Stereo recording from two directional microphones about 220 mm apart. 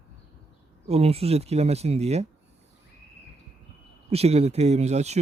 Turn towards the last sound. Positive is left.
turn(degrees=-30)  # may be behind; listen again after turning